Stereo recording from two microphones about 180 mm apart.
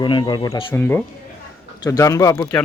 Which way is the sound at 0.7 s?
10° left (ahead or behind).